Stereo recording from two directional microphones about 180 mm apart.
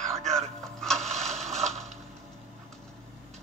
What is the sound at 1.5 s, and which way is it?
Mechanisms, 35° right (ahead or behind).